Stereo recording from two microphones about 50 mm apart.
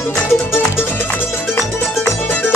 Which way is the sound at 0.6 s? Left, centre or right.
Left.